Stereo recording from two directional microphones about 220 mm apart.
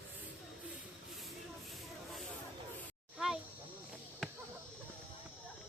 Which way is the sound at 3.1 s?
Centre (ahead or behind).